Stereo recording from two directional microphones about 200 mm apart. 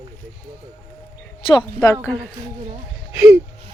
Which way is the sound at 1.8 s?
10° left (ahead or behind).